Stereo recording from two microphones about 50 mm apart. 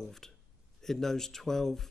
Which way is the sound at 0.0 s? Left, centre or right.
Centre.